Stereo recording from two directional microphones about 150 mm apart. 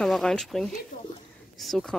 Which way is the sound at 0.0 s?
5° left (ahead or behind).